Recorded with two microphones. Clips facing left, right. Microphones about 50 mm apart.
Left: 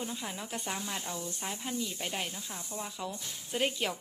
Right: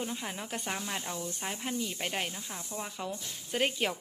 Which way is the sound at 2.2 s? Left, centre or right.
Centre.